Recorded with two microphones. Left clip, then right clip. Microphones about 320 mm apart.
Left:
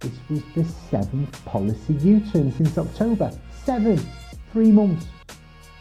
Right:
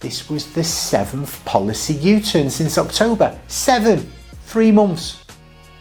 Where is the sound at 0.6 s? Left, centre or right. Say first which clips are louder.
Right 10 dB; centre.